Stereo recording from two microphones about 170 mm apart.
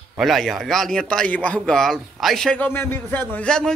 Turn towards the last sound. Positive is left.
turn(degrees=5)  # may be behind; listen again after turning